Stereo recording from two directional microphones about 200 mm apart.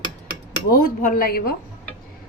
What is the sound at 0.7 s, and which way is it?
Speech, 45° left (ahead or behind).